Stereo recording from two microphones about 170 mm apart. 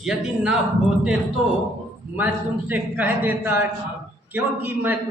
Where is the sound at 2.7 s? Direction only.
10° right (ahead or behind).